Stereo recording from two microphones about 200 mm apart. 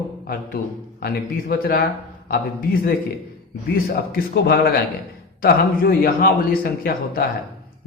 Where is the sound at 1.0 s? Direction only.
50° left (ahead or behind).